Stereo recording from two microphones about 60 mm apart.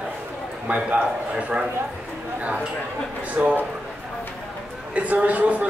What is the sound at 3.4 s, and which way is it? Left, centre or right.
Speech, right.